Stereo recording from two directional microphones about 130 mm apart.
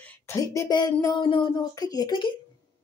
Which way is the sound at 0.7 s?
30° left (ahead or behind).